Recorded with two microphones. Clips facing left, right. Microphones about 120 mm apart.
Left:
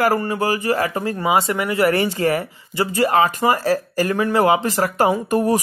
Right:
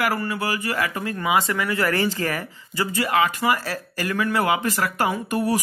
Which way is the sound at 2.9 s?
40° left (ahead or behind).